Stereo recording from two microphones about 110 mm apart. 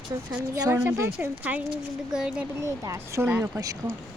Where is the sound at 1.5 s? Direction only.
10° right (ahead or behind).